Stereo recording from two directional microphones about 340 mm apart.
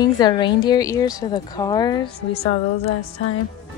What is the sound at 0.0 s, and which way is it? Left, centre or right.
A woman's voice, centre.